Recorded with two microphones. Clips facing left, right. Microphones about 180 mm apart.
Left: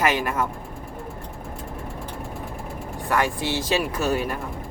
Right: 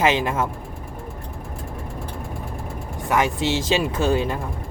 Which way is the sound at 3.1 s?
20° right (ahead or behind).